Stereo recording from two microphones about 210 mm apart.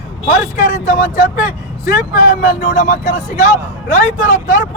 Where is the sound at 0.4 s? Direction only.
40° left (ahead or behind).